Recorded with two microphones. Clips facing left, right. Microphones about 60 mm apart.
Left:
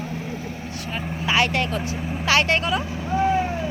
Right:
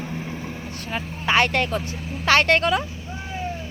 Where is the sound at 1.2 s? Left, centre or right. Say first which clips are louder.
Right 1 dB; right.